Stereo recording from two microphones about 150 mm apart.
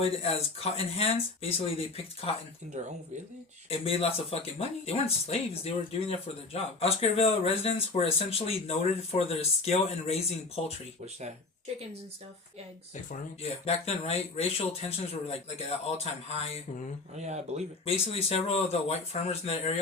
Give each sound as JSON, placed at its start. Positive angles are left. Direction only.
{"t": 0.0, "sound": "speech", "side_deg": 40}
{"t": 2.8, "sound": "speech", "side_deg": -50}
{"t": 3.7, "sound": "speech", "side_deg": 45}
{"t": 13.1, "sound": "speech", "side_deg": 45}
{"t": 17.2, "sound": "speech", "side_deg": -50}
{"t": 17.8, "sound": "speech", "side_deg": 40}